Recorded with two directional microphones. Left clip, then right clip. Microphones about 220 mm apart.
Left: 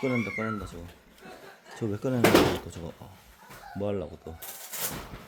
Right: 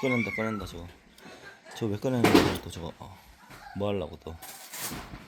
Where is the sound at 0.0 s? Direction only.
5° right (ahead or behind).